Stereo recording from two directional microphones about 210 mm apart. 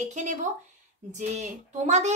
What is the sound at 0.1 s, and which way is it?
A woman's voice, 35° right (ahead or behind).